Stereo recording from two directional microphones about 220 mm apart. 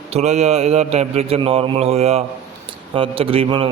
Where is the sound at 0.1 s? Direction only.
30° right (ahead or behind).